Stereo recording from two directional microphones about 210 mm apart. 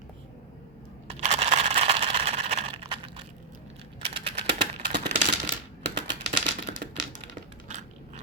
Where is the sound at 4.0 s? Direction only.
25° right (ahead or behind).